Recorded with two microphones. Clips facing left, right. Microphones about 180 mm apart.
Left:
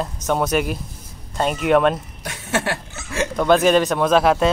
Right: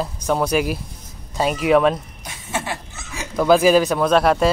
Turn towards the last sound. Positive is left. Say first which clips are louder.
# even
turn(degrees=0)  # may be behind; listen again after turning